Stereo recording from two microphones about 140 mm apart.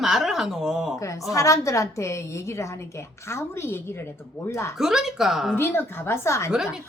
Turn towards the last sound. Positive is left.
turn(degrees=-5)  # may be behind; listen again after turning